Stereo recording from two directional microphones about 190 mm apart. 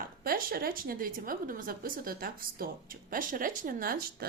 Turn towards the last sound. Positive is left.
turn(degrees=-50)  # may be behind; listen again after turning